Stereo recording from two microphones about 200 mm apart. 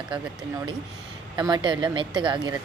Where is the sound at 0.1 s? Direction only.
20° right (ahead or behind).